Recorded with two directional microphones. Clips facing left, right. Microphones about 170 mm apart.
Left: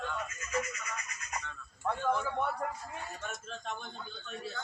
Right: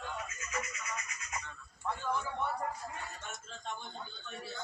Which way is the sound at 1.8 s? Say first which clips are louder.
Left 4 dB; 55° left (ahead or behind).